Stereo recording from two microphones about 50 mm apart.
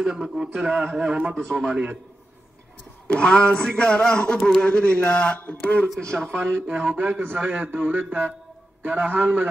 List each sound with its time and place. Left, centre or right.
0.0 s a man's voice: centre
3.1 s speech: left
5.9 s speech: centre
6.3 s speech: right